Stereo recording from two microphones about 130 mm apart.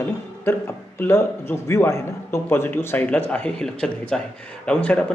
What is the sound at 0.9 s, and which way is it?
A man's voice, 15° left (ahead or behind).